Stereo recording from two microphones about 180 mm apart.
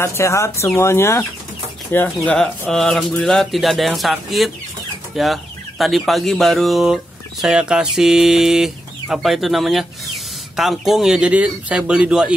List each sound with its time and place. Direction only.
0.0 s speech: 15° left (ahead or behind); by 12.3 s 5° right (ahead or behind)